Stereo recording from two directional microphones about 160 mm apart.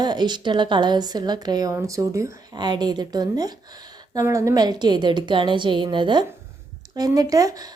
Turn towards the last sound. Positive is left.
turn(degrees=-20)  # may be behind; listen again after turning